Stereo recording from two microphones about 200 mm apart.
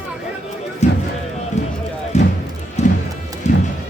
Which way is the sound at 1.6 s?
35° left (ahead or behind).